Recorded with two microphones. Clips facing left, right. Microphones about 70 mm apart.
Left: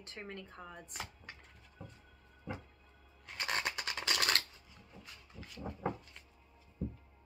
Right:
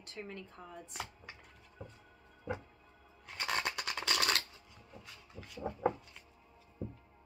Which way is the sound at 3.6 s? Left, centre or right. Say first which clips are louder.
Right 1 dB; centre.